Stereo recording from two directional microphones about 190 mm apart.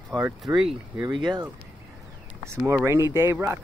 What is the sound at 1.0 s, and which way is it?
Speech, 20° right (ahead or behind).